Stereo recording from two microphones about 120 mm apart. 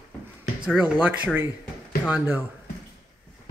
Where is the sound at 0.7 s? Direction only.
10° right (ahead or behind).